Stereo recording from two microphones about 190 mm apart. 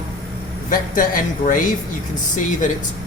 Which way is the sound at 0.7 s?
45° left (ahead or behind).